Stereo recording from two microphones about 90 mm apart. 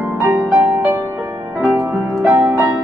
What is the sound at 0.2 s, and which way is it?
Music, 25° right (ahead or behind).